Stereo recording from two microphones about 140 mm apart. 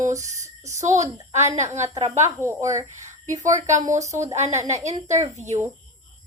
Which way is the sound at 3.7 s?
60° right (ahead or behind).